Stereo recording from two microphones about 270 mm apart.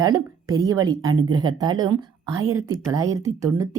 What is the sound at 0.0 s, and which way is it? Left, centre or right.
A woman's voice, centre.